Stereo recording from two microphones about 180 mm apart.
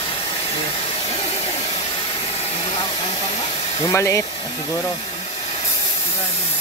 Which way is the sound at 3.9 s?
15° left (ahead or behind).